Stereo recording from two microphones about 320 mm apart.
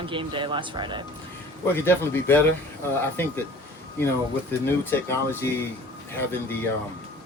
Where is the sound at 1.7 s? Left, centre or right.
Centre.